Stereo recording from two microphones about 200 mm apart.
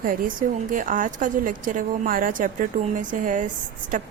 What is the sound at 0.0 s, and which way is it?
A woman's voice, 45° right (ahead or behind).